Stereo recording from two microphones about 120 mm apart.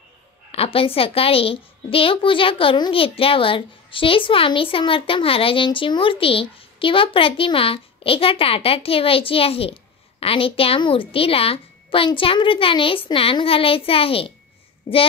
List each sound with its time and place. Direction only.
0.5 s a child's voice: 55° left (ahead or behind)